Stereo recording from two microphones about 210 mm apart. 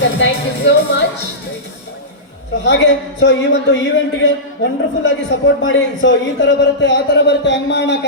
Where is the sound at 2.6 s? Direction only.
55° left (ahead or behind).